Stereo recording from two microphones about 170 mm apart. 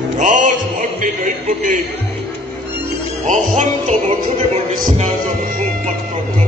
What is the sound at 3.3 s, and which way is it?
Music, 45° right (ahead or behind).